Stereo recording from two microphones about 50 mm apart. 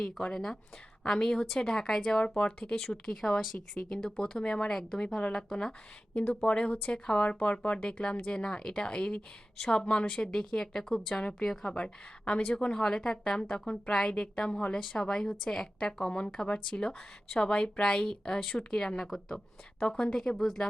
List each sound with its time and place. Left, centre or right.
0.0 s speech: centre
5.0 s speech: left
5.3 s speech: centre
11.7 s speech: left